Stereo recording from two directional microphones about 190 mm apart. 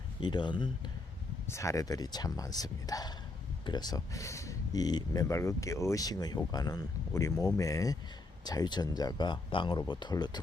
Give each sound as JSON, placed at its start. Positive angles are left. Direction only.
{"t": 0.2, "sound": "speech", "side_deg": 25}